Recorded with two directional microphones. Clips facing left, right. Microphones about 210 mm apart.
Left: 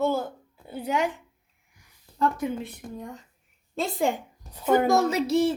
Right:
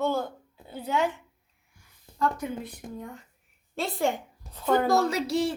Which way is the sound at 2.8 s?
20° right (ahead or behind).